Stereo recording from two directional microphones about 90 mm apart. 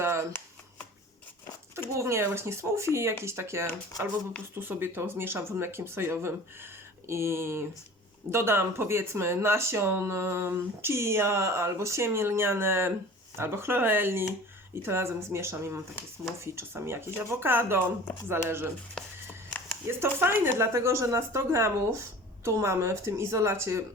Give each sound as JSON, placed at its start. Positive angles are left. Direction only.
{"t": 0.0, "sound": "shuffling cards", "side_deg": -30}
{"t": 1.9, "sound": "speech", "side_deg": -30}
{"t": 19.0, "sound": "speech", "side_deg": 10}
{"t": 19.9, "sound": "speech", "side_deg": -25}